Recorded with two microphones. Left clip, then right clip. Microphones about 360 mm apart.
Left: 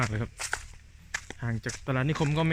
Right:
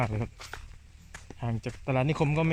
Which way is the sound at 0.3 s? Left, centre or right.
Left.